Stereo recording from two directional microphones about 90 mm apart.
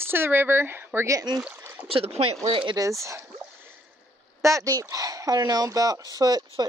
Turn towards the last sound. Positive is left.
turn(degrees=-45)  # may be behind; listen again after turning